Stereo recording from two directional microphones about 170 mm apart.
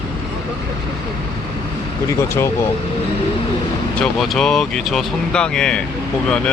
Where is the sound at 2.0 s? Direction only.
15° left (ahead or behind).